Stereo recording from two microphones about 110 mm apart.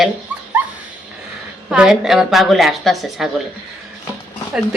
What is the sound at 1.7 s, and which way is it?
A woman's voice, 5° right (ahead or behind).